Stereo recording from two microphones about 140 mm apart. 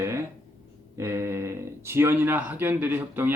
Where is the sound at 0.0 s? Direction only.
20° right (ahead or behind).